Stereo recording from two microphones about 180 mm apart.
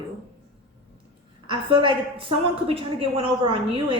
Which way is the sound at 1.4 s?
25° right (ahead or behind).